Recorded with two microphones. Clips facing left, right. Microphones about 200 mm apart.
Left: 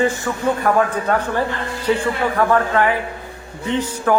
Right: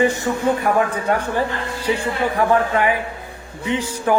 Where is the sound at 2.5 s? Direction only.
15° right (ahead or behind).